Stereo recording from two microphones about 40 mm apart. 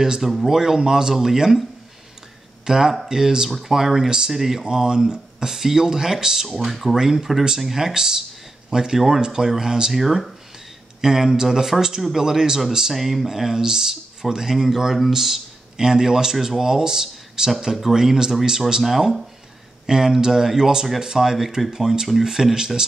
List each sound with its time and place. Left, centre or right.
0.0 s speech: centre
3.4 s speech: centre
4.6 s speech: centre
9.9 s speech: centre